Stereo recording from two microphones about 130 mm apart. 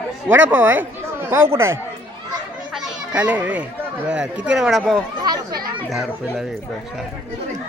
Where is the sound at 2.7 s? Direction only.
5° right (ahead or behind).